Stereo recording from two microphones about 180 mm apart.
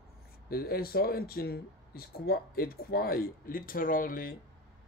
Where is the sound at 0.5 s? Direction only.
55° left (ahead or behind).